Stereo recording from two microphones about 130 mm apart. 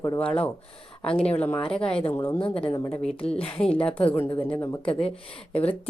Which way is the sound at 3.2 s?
45° left (ahead or behind).